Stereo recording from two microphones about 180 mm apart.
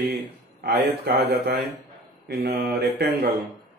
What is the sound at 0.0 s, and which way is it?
Speech, 60° right (ahead or behind).